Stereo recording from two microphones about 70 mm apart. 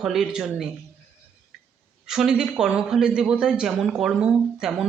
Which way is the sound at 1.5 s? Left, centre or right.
Centre.